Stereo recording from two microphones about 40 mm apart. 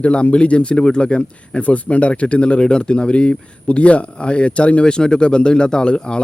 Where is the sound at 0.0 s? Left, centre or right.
Left.